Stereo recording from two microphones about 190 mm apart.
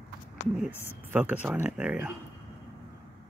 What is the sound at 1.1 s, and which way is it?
Speech, 10° right (ahead or behind).